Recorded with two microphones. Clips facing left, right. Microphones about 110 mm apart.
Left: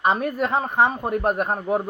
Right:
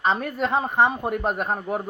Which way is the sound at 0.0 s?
10° left (ahead or behind).